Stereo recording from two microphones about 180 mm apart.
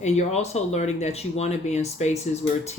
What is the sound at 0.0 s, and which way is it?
Speech, 40° left (ahead or behind).